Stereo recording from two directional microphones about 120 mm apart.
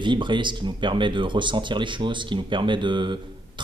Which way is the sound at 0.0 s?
40° right (ahead or behind).